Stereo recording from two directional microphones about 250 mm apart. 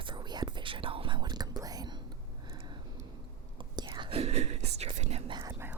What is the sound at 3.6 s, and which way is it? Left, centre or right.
Whispering, centre.